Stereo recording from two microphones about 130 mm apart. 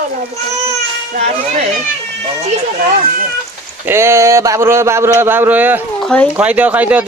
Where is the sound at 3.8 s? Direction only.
20° right (ahead or behind).